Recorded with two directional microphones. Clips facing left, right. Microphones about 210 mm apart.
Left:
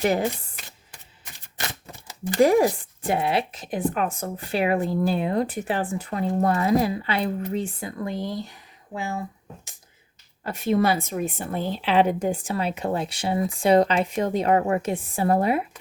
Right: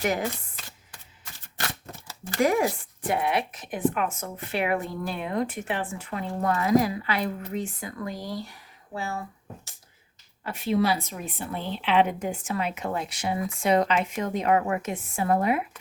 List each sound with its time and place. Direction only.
0.0 s a woman's voice: 30° left (ahead or behind)
2.4 s a woman's voice: 35° left (ahead or behind); by 9.2 s 15° left (ahead or behind)
10.4 s a woman's voice: 40° left (ahead or behind)